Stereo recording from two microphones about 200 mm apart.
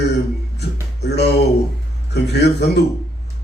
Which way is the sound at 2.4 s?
55° left (ahead or behind).